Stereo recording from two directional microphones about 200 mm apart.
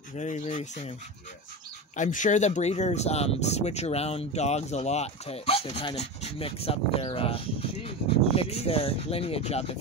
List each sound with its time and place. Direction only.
0.1 s speech: 35° left (ahead or behind)
2.0 s speech: 40° left (ahead or behind)